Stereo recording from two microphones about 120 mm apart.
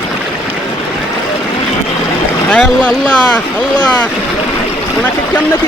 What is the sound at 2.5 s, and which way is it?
Speech, 5° left (ahead or behind).